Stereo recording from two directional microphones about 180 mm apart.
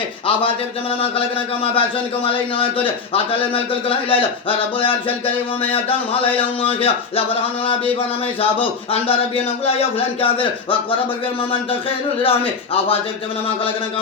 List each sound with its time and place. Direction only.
1.6 s a man's voice: 30° left (ahead or behind)
6.6 s a man's voice: 30° left (ahead or behind)
8.9 s a man's voice: 30° left (ahead or behind)
12.2 s a man's voice: 30° left (ahead or behind)